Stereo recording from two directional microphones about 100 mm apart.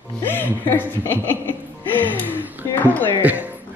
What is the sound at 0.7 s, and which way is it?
Speech, 20° left (ahead or behind).